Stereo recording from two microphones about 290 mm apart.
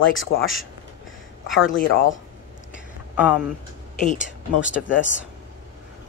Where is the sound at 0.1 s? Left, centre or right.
Left.